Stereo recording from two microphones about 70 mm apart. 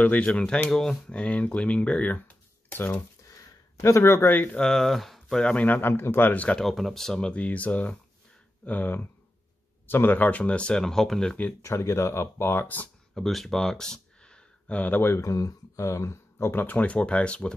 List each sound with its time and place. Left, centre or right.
0.0 s speech: centre
3.3 s a sound: left
4.5 s speech: centre
5.4 s speech: centre
5.8 s speech: left
6.6 s speech: centre
11.6 s speech: left
13.1 s speech: centre; by 15.2 s left
15.2 s speech: left; by 17.6 s centre